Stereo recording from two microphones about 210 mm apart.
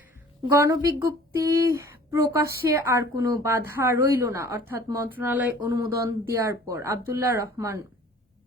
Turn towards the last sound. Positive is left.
turn(degrees=-15)  # may be behind; listen again after turning